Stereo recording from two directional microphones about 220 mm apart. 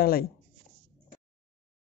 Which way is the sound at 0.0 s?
45° left (ahead or behind).